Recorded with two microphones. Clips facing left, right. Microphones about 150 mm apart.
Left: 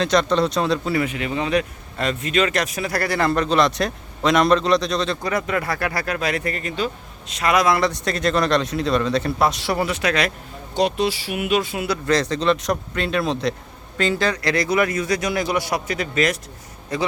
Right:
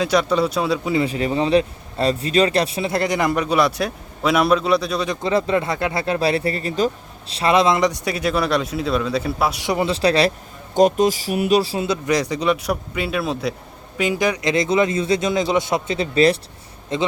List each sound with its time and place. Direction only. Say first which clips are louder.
0.0 s speech: even; 10° right (ahead or behind)
0.9 s speech: right 3 dB; 35° right (ahead or behind); by 5.1 s 10° right (ahead or behind)
5.2 s speech: right 4 dB; 25° right (ahead or behind)
9.9 s speech: right 5 dB; 30° right (ahead or behind)
10.8 s speech: right 5 dB; 45° right (ahead or behind)
11.9 s speech: even; 15° right (ahead or behind)